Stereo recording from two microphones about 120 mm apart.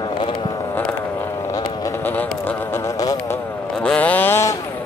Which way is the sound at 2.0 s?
15° left (ahead or behind).